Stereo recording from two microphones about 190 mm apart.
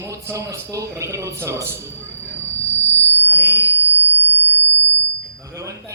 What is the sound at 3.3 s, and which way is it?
Speech, 10° right (ahead or behind).